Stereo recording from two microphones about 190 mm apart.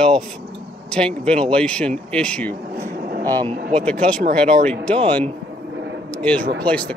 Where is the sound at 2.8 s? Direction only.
50° right (ahead or behind).